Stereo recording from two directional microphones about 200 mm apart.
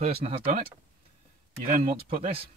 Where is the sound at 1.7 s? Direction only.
40° right (ahead or behind).